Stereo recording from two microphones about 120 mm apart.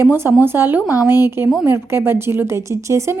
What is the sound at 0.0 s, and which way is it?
A woman's voice, 20° right (ahead or behind).